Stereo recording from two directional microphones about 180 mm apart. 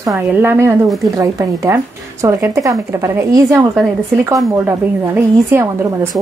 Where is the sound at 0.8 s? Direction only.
Centre (ahead or behind).